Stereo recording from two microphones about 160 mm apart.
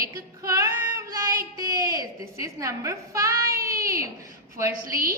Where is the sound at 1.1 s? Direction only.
20° right (ahead or behind).